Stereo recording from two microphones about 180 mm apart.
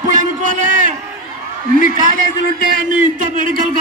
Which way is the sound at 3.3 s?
50° right (ahead or behind).